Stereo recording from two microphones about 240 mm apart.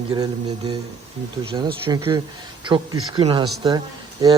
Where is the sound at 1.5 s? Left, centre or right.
Centre.